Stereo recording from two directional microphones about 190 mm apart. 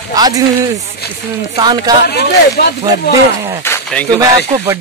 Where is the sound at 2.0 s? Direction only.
60° left (ahead or behind).